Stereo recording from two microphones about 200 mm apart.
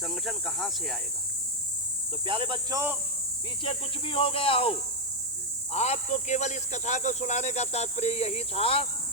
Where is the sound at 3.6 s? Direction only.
25° left (ahead or behind).